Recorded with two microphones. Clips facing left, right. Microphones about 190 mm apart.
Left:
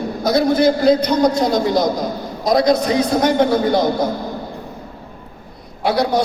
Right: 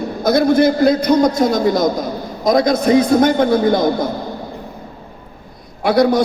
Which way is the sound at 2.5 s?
50° right (ahead or behind).